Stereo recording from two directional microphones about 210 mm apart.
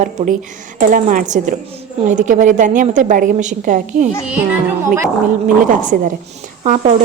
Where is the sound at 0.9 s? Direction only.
40° right (ahead or behind).